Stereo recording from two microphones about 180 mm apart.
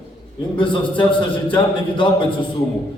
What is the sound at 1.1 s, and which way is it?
A man's voice, 25° left (ahead or behind).